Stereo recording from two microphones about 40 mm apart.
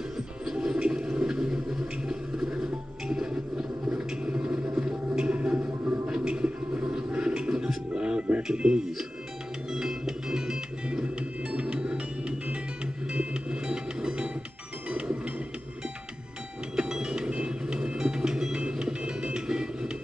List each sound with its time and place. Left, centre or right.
0.5 s music: centre
0.7 s a sound: right
5.3 s music: right
10.9 s music: right
16.7 s music: right